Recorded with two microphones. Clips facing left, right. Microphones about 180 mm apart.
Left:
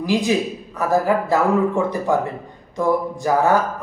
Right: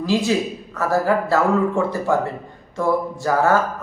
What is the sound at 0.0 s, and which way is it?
Speech, 15° left (ahead or behind).